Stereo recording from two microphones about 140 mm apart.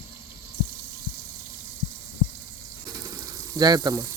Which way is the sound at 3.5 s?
30° right (ahead or behind).